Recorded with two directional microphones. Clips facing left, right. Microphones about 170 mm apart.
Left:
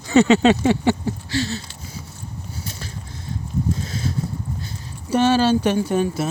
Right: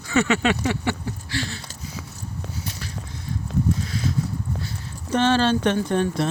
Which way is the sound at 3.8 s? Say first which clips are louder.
Even; 30° left (ahead or behind).